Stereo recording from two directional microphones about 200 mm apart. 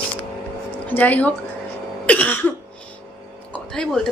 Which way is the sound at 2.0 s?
10° left (ahead or behind).